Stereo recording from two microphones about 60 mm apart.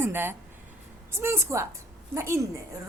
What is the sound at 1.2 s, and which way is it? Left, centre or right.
A woman's voice, right.